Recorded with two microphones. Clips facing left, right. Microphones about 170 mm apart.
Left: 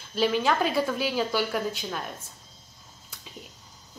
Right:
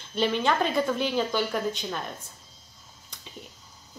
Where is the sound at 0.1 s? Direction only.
5° left (ahead or behind).